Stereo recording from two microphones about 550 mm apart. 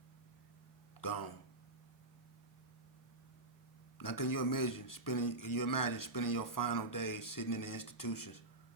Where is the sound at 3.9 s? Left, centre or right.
Left.